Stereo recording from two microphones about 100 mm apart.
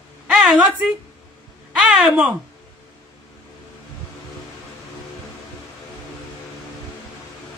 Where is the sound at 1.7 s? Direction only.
5° right (ahead or behind).